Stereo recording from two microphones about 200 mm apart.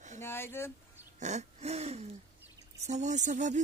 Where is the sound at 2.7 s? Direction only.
35° right (ahead or behind).